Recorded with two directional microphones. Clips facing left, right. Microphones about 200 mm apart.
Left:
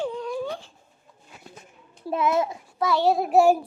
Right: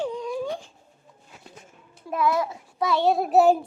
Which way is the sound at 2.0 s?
25° left (ahead or behind).